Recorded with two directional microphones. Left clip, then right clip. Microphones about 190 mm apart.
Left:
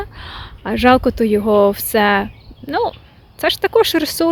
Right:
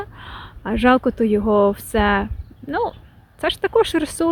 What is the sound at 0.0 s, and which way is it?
Speech, centre (ahead or behind).